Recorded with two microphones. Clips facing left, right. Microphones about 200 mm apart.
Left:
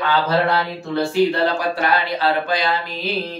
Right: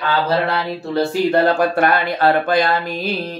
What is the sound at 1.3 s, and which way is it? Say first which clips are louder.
Speech: right 5 dB; 55° right (ahead or behind).